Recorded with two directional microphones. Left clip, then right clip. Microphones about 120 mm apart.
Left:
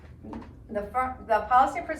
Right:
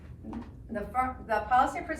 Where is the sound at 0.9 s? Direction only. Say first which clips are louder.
Left 3 dB; 20° left (ahead or behind).